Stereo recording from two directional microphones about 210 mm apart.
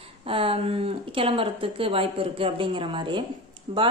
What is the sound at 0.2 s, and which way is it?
Speech, 25° right (ahead or behind).